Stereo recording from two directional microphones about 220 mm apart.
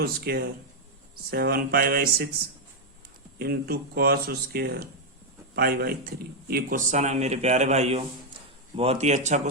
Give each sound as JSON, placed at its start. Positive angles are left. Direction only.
{"t": 0.0, "sound": "speech", "side_deg": -45}
{"t": 3.3, "sound": "a man's voice", "side_deg": -45}